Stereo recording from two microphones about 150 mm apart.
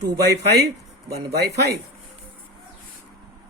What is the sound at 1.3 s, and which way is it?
Speech, 90° right.